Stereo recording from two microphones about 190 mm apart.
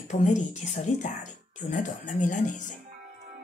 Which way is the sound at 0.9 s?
40° left (ahead or behind).